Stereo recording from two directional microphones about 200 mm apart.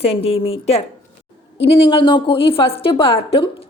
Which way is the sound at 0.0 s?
30° left (ahead or behind).